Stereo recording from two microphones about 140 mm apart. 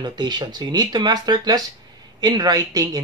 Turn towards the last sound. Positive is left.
turn(degrees=-25)  # may be behind; listen again after turning